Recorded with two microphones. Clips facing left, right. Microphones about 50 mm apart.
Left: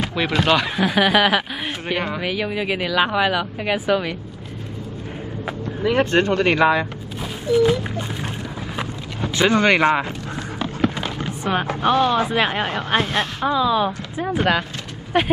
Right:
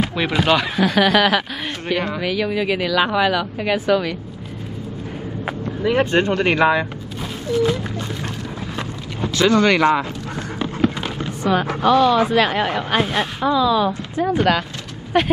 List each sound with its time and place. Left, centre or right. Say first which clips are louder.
0.0 s speech: right 1 dB; centre
0.8 s speech: right 1 dB; centre
5.9 s speech: even; centre
7.5 s a sound: left 2 dB; centre
9.3 s speech: right 1 dB; left
10.8 s a sound: right 2 dB; centre
11.2 s a sound: right 4 dB; left
11.8 s speech: right 3 dB; left
12.6 s speech: right 1 dB; centre
13.0 s speech: right 1 dB; centre
13.5 s speech: right 2 dB; left